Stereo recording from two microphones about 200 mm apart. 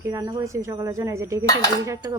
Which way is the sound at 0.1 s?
20° right (ahead or behind).